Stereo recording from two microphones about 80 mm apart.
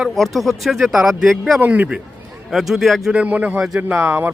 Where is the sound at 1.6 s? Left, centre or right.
Centre.